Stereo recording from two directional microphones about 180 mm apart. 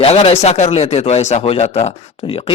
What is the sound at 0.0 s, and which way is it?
Speech, 30° left (ahead or behind).